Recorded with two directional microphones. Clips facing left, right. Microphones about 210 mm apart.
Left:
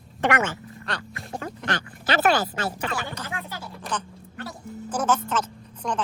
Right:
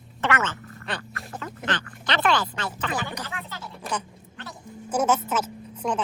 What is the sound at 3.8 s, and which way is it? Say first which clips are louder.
A woman's voice: right 2 dB; 10° right (ahead or behind).